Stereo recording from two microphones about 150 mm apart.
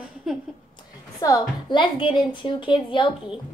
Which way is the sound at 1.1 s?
20° left (ahead or behind).